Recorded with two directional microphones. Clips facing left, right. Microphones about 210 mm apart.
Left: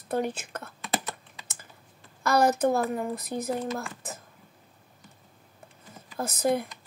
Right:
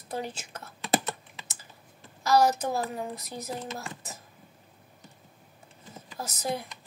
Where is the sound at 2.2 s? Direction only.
55° left (ahead or behind).